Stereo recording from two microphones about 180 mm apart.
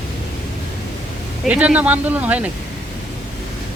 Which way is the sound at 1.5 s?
5° right (ahead or behind).